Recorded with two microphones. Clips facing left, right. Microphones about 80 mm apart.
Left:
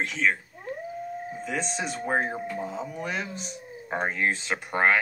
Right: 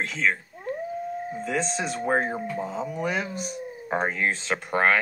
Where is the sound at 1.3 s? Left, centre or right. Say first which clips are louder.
Right 3 dB; centre.